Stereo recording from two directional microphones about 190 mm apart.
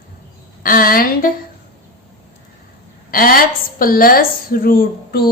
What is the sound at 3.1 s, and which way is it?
A woman's voice, 50° left (ahead or behind).